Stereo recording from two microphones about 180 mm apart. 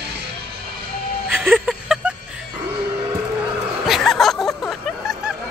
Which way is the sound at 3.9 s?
Centre (ahead or behind).